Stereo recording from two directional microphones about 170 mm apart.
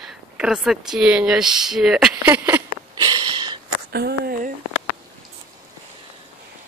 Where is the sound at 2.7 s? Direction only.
25° right (ahead or behind).